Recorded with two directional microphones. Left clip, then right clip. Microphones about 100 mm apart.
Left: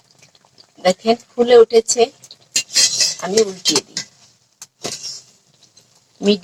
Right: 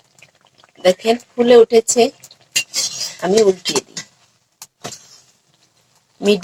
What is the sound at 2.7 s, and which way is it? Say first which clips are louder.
Cutlery: left 7 dB; 20° right (ahead or behind).